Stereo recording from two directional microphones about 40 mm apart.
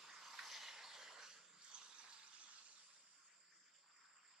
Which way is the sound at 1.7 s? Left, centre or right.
Right.